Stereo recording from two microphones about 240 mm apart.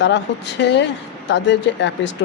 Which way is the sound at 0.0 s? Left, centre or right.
Left.